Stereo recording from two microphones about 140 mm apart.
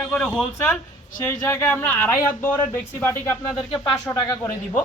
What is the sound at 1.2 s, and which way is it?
Speech, 15° left (ahead or behind).